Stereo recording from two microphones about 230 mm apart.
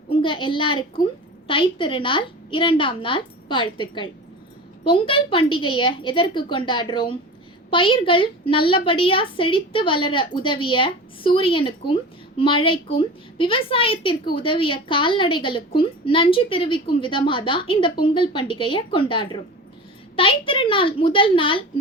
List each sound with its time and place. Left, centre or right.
0.2 s a woman's voice: left